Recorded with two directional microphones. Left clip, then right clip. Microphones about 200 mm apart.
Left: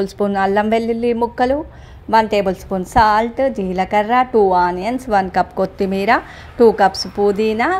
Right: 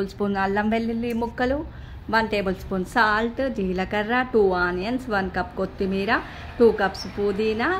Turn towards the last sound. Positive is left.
turn(degrees=30)  # may be behind; listen again after turning